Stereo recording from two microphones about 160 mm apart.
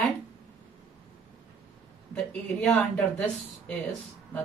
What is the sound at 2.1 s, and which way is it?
Speech, 5° left (ahead or behind).